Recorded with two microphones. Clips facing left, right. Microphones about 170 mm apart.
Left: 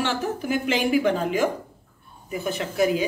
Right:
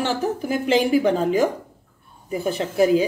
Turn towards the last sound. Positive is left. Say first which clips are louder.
# right 5 dB
turn(degrees=-30)  # may be behind; listen again after turning